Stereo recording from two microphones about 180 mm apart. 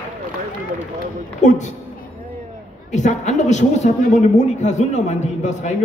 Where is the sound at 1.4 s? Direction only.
40° left (ahead or behind).